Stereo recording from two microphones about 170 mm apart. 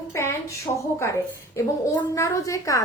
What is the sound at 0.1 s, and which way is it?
A woman's voice, 15° left (ahead or behind).